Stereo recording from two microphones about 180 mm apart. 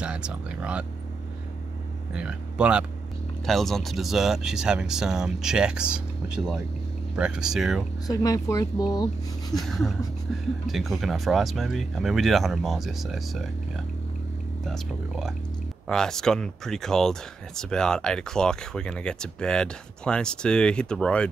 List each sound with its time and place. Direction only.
0.0 s speech: 5° right (ahead or behind)
2.1 s speech: 5° right (ahead or behind)
8.1 s speech: 20° left (ahead or behind)
9.6 s speech: centre (ahead or behind)
14.7 s speech: centre (ahead or behind)